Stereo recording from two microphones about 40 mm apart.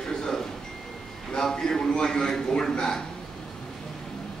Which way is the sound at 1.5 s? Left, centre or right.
Centre.